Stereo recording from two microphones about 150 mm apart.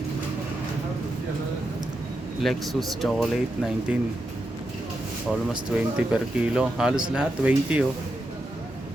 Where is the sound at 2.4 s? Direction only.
Centre (ahead or behind).